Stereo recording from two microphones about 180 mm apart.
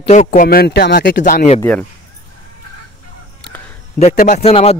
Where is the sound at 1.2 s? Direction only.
40° left (ahead or behind).